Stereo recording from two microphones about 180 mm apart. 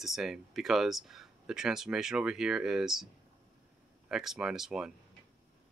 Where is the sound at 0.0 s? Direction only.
Centre (ahead or behind).